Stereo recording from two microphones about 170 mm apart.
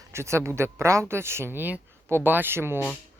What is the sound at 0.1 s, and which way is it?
Speech, 15° right (ahead or behind).